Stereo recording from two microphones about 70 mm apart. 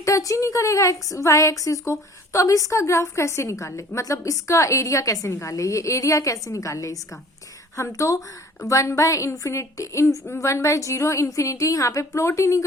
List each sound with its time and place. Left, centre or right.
0.0 s a woman's voice: left